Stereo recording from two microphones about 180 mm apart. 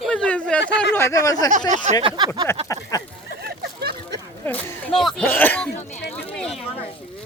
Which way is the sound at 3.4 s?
60° right (ahead or behind).